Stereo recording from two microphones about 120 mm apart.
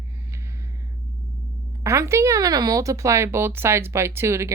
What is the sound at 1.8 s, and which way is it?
Speech, 25° right (ahead or behind).